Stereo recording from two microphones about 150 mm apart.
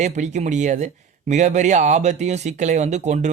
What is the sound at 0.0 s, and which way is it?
Speech, 50° right (ahead or behind).